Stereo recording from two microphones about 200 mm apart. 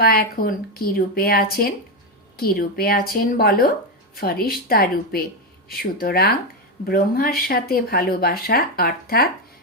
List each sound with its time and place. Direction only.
0.0 s speech: 50° left (ahead or behind)